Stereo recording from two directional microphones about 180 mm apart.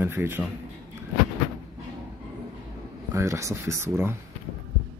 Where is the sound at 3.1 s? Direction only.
15° right (ahead or behind).